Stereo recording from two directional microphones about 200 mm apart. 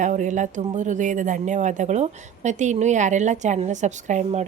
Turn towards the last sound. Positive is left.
turn(degrees=-35)  # may be behind; listen again after turning